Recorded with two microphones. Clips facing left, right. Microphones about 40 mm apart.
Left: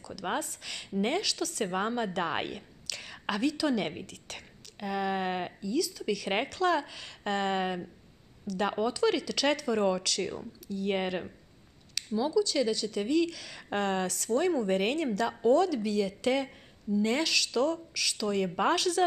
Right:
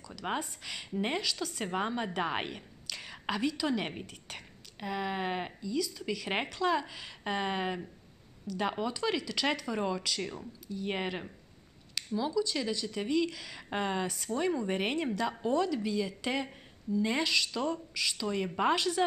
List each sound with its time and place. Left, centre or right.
0.4 s speech: centre
1.6 s a woman's voice: centre
5.7 s speech: centre
8.9 s speech: centre
10.2 s speech: centre
10.7 s speech: centre
11.0 s speech: centre
12.2 s speech: centre